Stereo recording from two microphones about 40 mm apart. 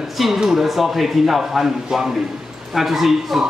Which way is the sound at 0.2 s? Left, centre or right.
Centre.